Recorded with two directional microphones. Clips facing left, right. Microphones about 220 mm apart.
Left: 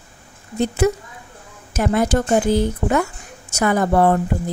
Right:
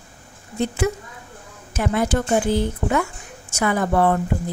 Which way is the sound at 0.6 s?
40° left (ahead or behind).